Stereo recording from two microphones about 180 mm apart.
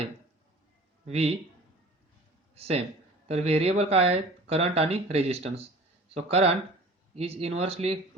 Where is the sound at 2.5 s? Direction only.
35° right (ahead or behind).